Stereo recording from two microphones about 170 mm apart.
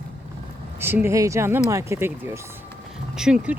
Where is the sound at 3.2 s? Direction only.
5° right (ahead or behind).